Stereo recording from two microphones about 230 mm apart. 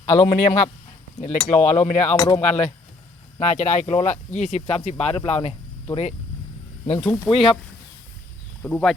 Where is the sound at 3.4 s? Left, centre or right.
Left.